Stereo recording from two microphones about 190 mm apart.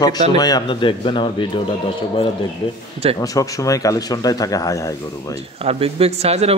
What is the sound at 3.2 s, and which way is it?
Speech, 20° left (ahead or behind).